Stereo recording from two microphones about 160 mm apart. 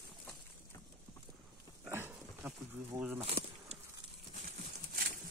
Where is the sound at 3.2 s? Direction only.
40° right (ahead or behind).